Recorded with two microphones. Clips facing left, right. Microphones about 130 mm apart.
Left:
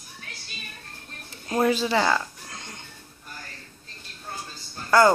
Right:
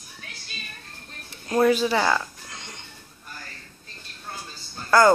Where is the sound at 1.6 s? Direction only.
30° left (ahead or behind).